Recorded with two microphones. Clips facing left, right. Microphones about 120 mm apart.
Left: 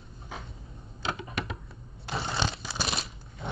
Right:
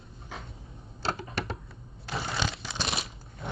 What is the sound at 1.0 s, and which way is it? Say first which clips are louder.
Typewriter: right 1 dB; 35° right (ahead or behind).